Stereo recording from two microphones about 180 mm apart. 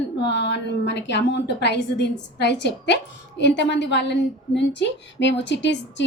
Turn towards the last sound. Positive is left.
turn(degrees=75)  # may be behind; listen again after turning